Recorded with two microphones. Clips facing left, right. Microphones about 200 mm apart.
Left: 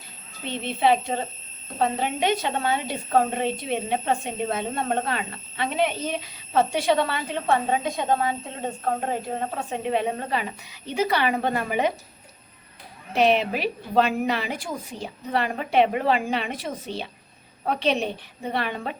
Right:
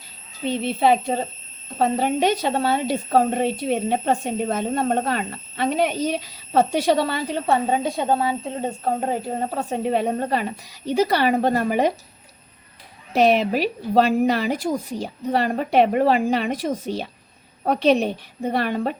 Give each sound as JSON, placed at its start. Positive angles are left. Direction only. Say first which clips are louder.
{"t": 0.4, "sound": "a woman's voice", "louder": "right 3 dB", "side_deg": -40}
{"t": 9.6, "sound": "a woman's voice", "louder": "right 4 dB", "side_deg": -40}
{"t": 13.1, "sound": "a woman's voice", "louder": "right 3 dB", "side_deg": -40}